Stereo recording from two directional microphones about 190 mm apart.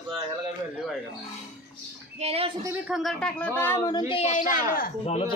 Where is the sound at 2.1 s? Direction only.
30° right (ahead or behind).